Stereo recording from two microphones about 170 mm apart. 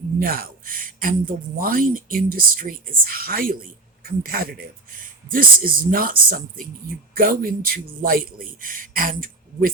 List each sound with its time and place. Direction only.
0.2 s speech: 60° right (ahead or behind)